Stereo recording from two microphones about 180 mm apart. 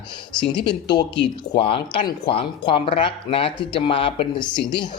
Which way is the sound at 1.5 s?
30° left (ahead or behind).